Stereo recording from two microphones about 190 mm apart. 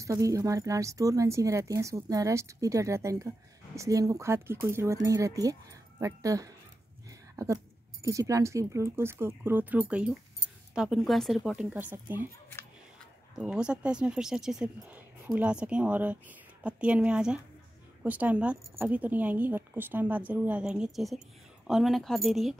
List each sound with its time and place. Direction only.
0.0 s a woman's voice: 15° right (ahead or behind)
13.4 s a woman's voice: 5° right (ahead or behind)